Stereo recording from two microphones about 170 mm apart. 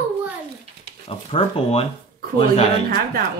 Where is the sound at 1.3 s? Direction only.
35° left (ahead or behind).